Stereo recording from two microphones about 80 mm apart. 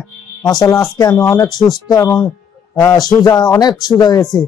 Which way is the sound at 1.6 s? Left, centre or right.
Left.